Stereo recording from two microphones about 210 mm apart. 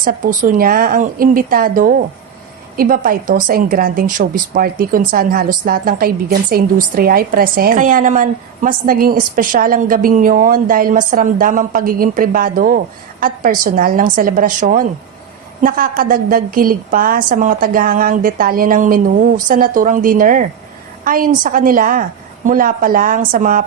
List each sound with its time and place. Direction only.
0.0 s a woman's voice: 40° right (ahead or behind)